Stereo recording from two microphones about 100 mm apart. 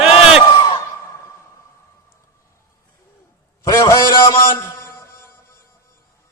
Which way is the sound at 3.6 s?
35° left (ahead or behind).